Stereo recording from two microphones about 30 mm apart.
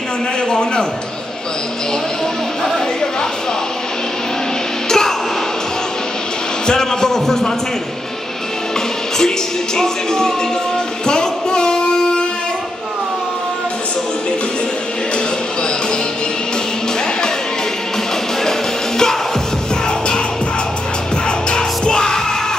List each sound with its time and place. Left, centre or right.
0.5 s a man's voice: left
4.8 s a sound: centre
6.6 s a man's voice: left
9.8 s a man's voice: centre
11.1 s a sound: left
18.4 s music: centre
21.3 s music: left